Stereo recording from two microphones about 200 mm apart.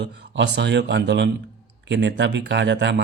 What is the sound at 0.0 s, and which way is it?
Speech, 60° right (ahead or behind).